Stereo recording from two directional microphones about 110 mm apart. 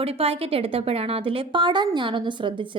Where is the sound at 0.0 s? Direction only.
60° right (ahead or behind).